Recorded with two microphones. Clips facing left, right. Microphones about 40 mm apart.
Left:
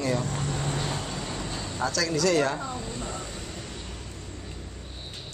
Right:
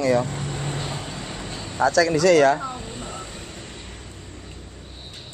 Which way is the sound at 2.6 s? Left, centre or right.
Right.